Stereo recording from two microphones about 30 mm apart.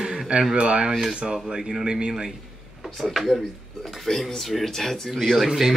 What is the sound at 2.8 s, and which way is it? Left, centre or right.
Speech, centre.